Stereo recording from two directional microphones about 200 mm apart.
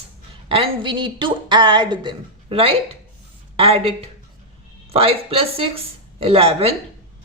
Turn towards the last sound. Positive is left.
turn(degrees=-30)  # may be behind; listen again after turning